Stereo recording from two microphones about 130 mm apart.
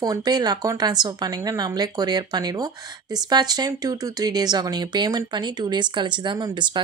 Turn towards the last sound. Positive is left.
turn(degrees=-35)  # may be behind; listen again after turning